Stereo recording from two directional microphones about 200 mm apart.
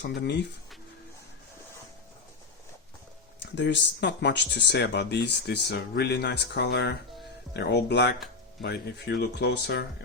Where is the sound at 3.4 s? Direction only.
60° left (ahead or behind).